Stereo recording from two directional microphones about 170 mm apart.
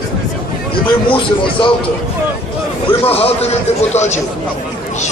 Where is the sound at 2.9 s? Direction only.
35° left (ahead or behind).